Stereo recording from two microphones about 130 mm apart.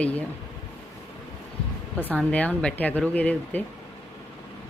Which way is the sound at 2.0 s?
10° left (ahead or behind).